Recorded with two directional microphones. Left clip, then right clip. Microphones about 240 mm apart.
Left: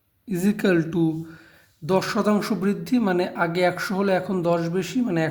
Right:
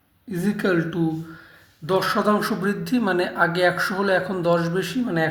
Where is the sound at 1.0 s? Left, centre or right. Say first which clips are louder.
Left 1 dB; left.